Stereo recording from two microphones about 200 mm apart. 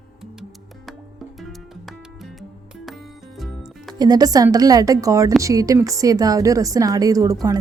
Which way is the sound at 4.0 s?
20° right (ahead or behind).